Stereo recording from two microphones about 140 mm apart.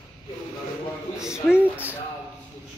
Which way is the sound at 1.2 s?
5° right (ahead or behind).